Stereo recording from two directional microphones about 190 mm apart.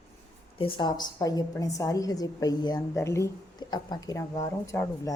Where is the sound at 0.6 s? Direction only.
25° left (ahead or behind).